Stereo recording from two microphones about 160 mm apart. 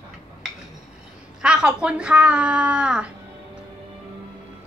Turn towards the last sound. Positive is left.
turn(degrees=-5)  # may be behind; listen again after turning